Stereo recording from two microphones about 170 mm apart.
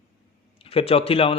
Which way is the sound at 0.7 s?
35° left (ahead or behind).